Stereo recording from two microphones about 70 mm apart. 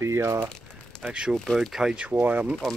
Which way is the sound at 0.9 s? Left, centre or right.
Centre.